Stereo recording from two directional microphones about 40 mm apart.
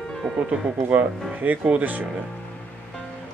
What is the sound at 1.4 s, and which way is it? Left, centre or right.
Speech, right.